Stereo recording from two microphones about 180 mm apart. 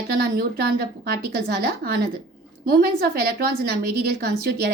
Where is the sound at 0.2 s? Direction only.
60° right (ahead or behind).